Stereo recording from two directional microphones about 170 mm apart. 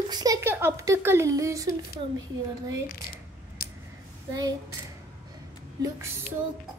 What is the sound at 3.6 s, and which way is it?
Scissors, 60° left (ahead or behind).